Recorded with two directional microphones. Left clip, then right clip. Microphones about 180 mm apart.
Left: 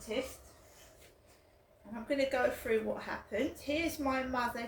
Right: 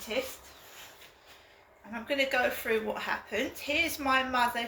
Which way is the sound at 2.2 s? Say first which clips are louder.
Right 4 dB; 10° left (ahead or behind).